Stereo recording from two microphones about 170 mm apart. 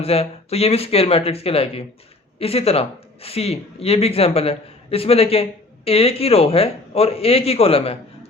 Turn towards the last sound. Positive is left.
turn(degrees=35)  # may be behind; listen again after turning